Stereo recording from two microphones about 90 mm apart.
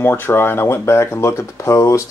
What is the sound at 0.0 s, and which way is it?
Speech, 25° left (ahead or behind).